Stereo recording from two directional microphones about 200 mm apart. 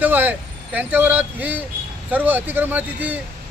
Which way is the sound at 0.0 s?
10° right (ahead or behind).